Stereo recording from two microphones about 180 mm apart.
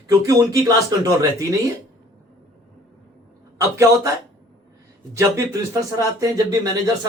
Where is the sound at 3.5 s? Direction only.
15° right (ahead or behind).